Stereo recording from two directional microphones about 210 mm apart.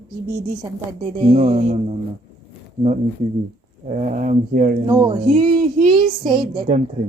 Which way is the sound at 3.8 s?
35° right (ahead or behind).